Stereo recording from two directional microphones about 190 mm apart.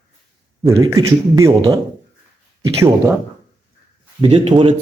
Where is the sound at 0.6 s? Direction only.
15° right (ahead or behind).